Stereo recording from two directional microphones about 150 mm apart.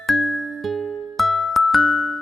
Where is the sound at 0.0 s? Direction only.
Centre (ahead or behind).